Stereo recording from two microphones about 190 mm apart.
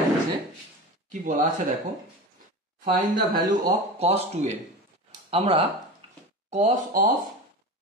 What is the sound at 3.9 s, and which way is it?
Speech, 35° right (ahead or behind).